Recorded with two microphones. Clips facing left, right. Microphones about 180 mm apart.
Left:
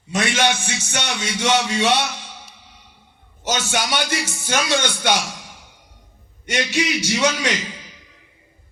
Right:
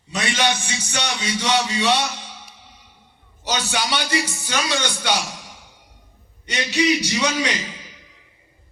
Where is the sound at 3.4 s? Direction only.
50° left (ahead or behind).